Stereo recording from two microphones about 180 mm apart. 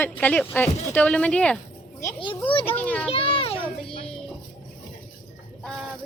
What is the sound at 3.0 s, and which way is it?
Speech, 30° left (ahead or behind).